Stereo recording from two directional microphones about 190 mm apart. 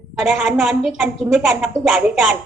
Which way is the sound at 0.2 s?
5° right (ahead or behind).